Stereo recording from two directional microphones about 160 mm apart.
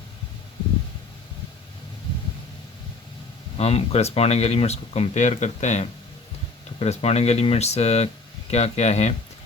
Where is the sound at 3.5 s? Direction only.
40° left (ahead or behind).